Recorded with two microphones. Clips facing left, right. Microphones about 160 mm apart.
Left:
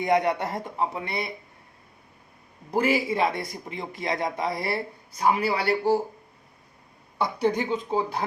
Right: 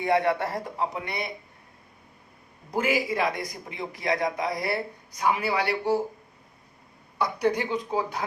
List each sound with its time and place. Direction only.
0.0 s a man's voice: 20° left (ahead or behind)
1.0 s a man's voice: 30° left (ahead or behind)
2.7 s a man's voice: 30° left (ahead or behind)
7.2 s a man's voice: 25° left (ahead or behind)